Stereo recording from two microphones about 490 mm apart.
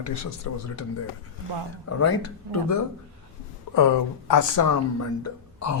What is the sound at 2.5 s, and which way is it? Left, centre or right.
Speech, left.